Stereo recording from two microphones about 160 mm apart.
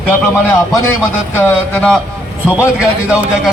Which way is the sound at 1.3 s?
10° left (ahead or behind).